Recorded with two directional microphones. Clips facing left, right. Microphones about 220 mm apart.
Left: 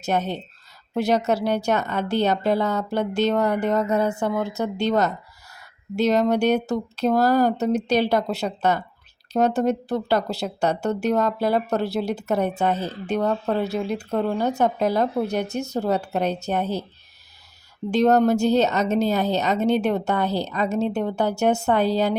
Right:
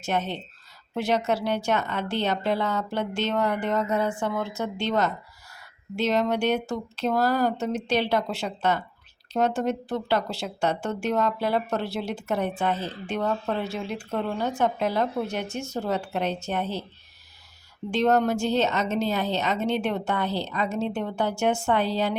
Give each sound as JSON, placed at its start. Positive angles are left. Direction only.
{"t": 0.0, "sound": "a woman's voice", "side_deg": 40}
{"t": 17.9, "sound": "a woman's voice", "side_deg": 40}